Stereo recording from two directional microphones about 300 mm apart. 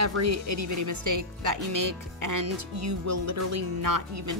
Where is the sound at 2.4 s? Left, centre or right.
Right.